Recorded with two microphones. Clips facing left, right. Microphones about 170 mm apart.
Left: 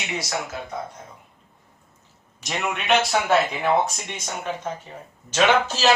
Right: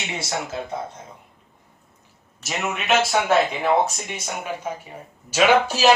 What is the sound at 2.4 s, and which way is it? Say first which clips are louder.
A man's voice: even; 5° right (ahead or behind).